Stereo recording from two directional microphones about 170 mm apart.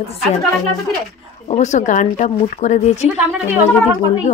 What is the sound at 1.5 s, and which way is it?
Speech, 45° left (ahead or behind).